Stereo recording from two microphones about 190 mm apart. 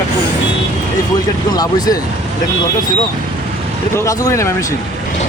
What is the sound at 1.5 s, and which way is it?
Speech, 20° left (ahead or behind).